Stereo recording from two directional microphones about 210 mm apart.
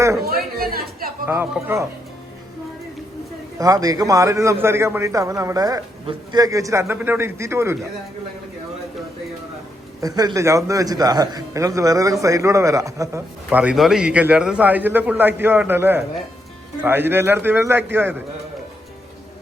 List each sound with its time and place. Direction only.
0.6 s speech: 45° right (ahead or behind)
1.3 s a man's voice: 10° right (ahead or behind)
3.6 s a man's voice: 15° right (ahead or behind)
10.0 s a man's voice: 15° right (ahead or behind)